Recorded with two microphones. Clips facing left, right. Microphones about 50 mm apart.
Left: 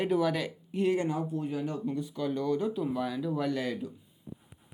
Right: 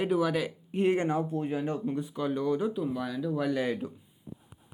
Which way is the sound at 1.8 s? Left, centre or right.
Right.